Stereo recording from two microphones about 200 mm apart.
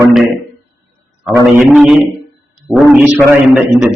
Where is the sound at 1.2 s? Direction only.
5° right (ahead or behind).